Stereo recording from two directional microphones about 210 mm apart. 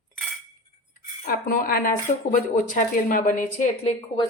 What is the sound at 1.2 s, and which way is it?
A woman's voice, 40° left (ahead or behind).